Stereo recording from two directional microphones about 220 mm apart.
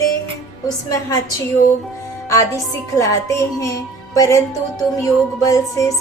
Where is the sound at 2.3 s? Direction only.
15° left (ahead or behind).